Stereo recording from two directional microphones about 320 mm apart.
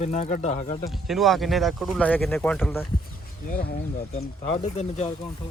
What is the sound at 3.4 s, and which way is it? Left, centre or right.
Speech, left.